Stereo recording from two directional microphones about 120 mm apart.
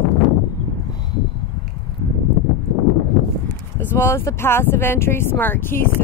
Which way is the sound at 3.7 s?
20° left (ahead or behind).